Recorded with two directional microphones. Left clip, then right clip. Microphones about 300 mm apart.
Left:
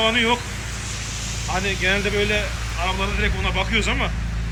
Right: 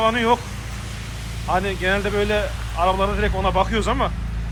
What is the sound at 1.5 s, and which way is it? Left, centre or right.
Speech, centre.